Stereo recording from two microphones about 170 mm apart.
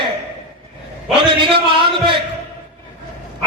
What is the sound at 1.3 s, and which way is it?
Speech, 30° right (ahead or behind).